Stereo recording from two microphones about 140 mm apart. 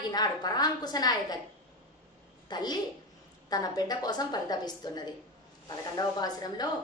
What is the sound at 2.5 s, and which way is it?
A woman's voice, 30° left (ahead or behind).